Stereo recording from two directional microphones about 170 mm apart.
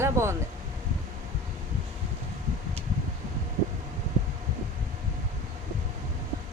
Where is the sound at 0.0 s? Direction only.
15° right (ahead or behind).